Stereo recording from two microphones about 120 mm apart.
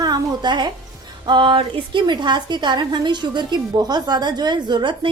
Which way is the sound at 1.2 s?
40° right (ahead or behind).